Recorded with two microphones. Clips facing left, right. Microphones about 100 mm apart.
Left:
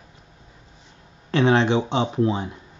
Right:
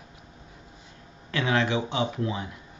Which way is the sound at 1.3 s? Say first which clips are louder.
Left 7 dB; 30° left (ahead or behind).